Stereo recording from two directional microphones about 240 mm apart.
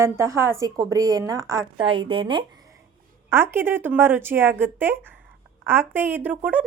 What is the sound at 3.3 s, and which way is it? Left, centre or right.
A woman's voice, centre.